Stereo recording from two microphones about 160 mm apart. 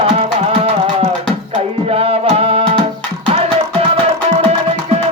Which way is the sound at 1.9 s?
40° right (ahead or behind).